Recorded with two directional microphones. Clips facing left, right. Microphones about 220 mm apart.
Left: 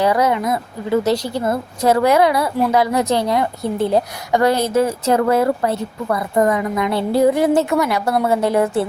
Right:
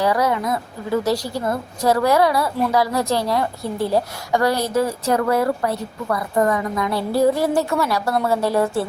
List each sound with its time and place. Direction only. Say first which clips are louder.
0.0 s a woman's voice: left 3 dB; 20° left (ahead or behind)